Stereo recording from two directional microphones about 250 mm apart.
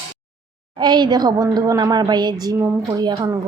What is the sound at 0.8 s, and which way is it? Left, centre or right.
A woman's voice, centre.